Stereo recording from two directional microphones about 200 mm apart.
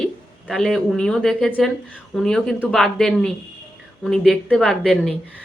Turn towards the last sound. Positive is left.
turn(degrees=0)  # may be behind; listen again after turning